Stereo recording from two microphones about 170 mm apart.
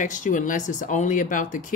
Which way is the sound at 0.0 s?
50° left (ahead or behind).